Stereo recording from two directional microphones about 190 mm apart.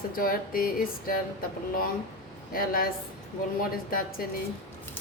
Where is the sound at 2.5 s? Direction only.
50° left (ahead or behind).